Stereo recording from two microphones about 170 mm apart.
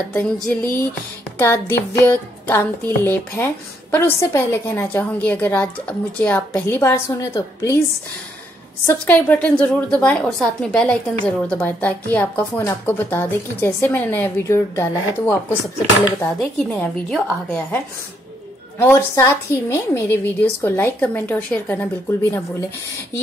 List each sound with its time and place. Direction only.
0.1 s music: 10° left (ahead or behind)
8.8 s music: 10° left (ahead or behind)
18.8 s music: 15° left (ahead or behind)